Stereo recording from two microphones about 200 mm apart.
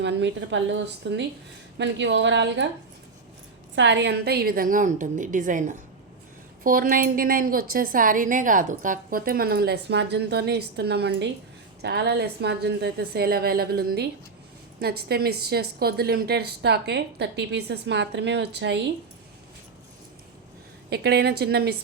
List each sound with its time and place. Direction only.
0.0 s speech: 60° right (ahead or behind)
3.8 s a woman's voice: 60° right (ahead or behind)
20.9 s a woman's voice: 55° right (ahead or behind)